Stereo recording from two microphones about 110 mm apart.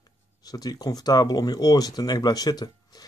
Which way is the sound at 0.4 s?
35° left (ahead or behind).